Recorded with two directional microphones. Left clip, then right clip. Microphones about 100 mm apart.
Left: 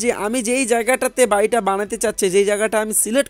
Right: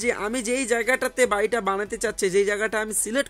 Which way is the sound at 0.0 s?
50° left (ahead or behind).